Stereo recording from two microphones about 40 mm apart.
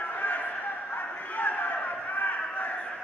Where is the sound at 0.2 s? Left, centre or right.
Left.